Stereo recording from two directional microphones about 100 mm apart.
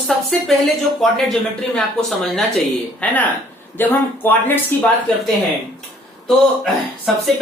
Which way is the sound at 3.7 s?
20° left (ahead or behind).